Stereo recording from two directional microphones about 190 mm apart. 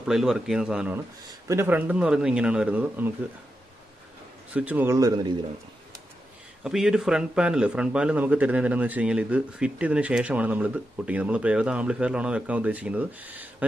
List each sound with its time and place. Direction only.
0.0 s speech: 5° right (ahead or behind)
4.6 s speech: 10° right (ahead or behind)
6.6 s speech: 5° right (ahead or behind)